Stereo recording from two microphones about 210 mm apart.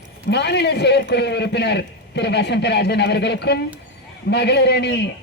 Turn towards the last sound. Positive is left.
turn(degrees=55)  # may be behind; listen again after turning